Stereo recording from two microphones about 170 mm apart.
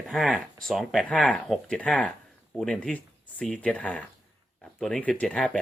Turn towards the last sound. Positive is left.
turn(degrees=5)  # may be behind; listen again after turning